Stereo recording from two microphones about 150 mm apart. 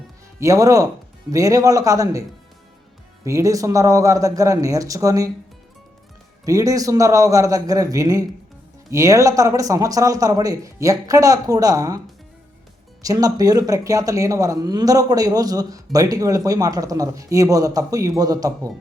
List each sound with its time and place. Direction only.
0.3 s speech: 20° right (ahead or behind)
3.2 s speech: 20° right (ahead or behind)
6.4 s speech: 20° right (ahead or behind)
13.0 s speech: 25° right (ahead or behind)